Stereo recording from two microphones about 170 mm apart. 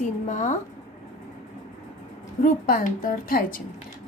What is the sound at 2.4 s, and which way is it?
A woman's voice, 55° left (ahead or behind).